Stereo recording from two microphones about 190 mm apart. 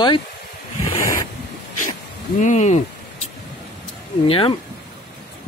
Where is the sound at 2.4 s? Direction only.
35° left (ahead or behind).